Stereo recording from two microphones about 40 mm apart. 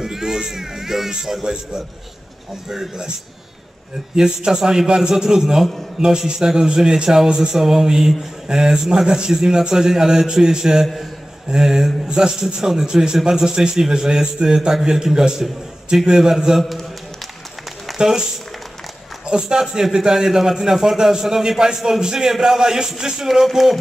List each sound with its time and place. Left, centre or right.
0.0 s a man's voice: centre
4.1 s a man's voice: centre
17.9 s speech: centre
19.2 s a man's voice: right; by 23.8 s centre